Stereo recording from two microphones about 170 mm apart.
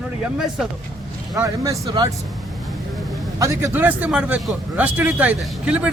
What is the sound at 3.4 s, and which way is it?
A man's voice, 15° right (ahead or behind).